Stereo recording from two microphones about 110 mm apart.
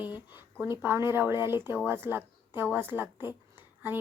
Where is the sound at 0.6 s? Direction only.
20° right (ahead or behind).